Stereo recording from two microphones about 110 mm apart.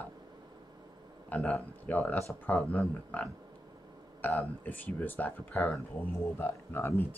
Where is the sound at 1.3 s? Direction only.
15° left (ahead or behind).